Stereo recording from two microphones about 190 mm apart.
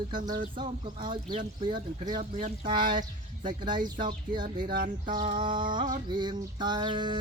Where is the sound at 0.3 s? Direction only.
25° right (ahead or behind).